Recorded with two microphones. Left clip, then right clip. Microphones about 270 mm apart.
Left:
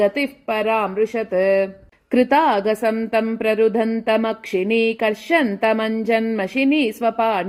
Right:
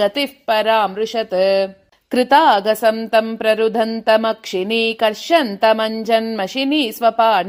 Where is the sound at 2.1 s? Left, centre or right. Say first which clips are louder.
Right 4 dB; right.